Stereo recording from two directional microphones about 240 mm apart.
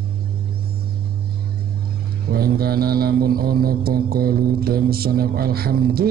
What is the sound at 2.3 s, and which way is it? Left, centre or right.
Mantra, right.